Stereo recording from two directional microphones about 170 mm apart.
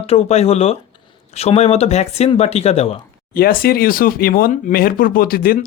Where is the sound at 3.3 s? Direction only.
60° left (ahead or behind).